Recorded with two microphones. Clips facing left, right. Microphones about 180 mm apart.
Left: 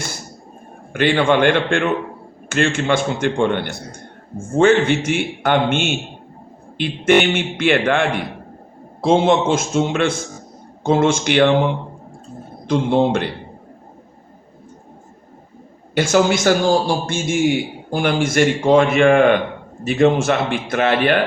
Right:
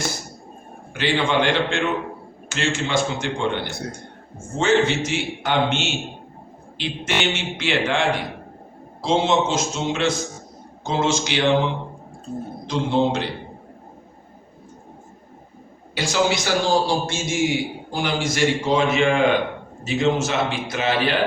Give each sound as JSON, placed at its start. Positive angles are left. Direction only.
{"t": 0.9, "sound": "a man's voice", "side_deg": 55}
{"t": 16.0, "sound": "a man's voice", "side_deg": 50}